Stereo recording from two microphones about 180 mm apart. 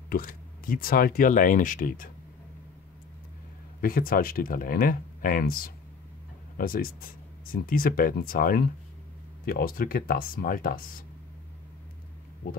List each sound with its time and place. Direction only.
0.1 s speech: 50° left (ahead or behind)
3.8 s speech: 50° left (ahead or behind)